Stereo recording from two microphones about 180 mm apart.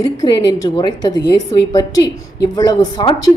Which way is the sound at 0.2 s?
25° left (ahead or behind).